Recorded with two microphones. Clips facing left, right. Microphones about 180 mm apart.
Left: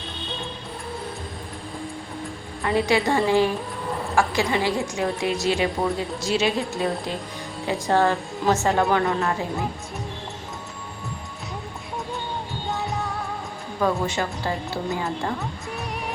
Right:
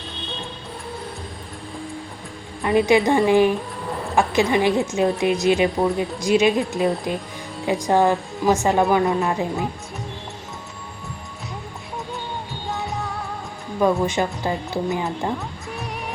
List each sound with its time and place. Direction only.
2.6 s a woman's voice: 20° right (ahead or behind)
5.7 s speech: centre (ahead or behind)
6.2 s a woman's voice: 15° right (ahead or behind)
12.6 s music: centre (ahead or behind)
13.7 s a woman's voice: 15° right (ahead or behind)